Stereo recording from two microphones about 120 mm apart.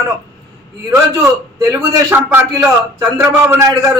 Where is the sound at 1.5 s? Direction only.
25° right (ahead or behind).